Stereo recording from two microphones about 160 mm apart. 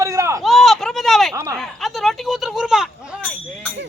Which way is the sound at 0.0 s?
20° right (ahead or behind).